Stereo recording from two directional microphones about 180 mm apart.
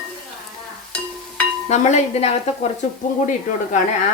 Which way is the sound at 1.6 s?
40° left (ahead or behind).